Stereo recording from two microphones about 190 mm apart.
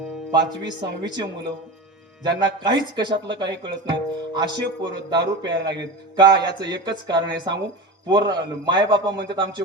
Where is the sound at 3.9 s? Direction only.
25° right (ahead or behind).